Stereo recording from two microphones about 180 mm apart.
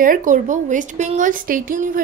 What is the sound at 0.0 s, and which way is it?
Speech, 45° right (ahead or behind).